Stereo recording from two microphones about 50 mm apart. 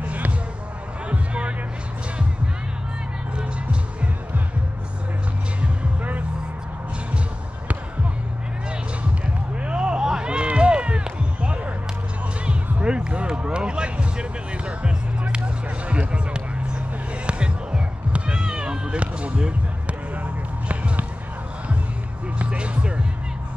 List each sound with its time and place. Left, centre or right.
0.0 s basketball bounce: right
1.0 s music: right
5.6 s music: right
9.2 s a sound: right
12.8 s music: centre
17.3 s cat: centre
20.6 s basketball bounce: right
22.4 s music: right